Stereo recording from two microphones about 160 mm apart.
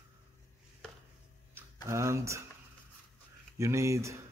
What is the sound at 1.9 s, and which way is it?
Speech, 15° right (ahead or behind).